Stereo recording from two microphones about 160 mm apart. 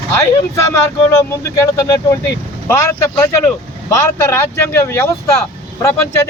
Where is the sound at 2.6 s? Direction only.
15° left (ahead or behind).